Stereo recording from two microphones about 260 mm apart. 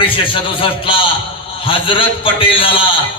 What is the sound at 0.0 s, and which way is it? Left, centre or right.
A man's voice, centre.